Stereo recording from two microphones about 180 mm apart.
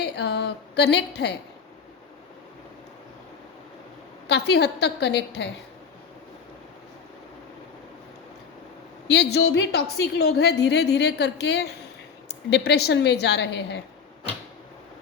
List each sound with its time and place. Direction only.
0.0 s a woman's voice: 70° left (ahead or behind)
4.3 s a woman's voice: 70° left (ahead or behind)
9.0 s a woman's voice: 70° left (ahead or behind)